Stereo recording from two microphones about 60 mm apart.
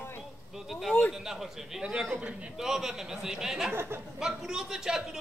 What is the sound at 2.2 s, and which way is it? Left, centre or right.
Speech, centre.